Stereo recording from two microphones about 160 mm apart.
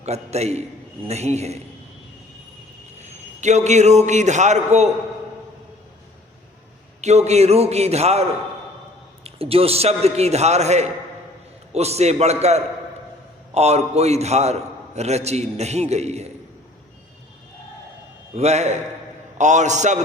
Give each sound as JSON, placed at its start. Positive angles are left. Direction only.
{"t": 0.0, "sound": "a man's voice", "side_deg": -40}
{"t": 3.0, "sound": "a man's voice", "side_deg": -45}
{"t": 7.0, "sound": "a man's voice", "side_deg": -45}
{"t": 9.2, "sound": "a man's voice", "side_deg": -35}
{"t": 18.3, "sound": "a man's voice", "side_deg": -45}